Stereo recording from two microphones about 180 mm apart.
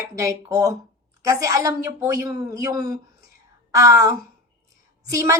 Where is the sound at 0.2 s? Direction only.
20° right (ahead or behind).